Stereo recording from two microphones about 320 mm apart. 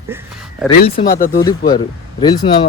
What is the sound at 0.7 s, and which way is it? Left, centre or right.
Speech, left.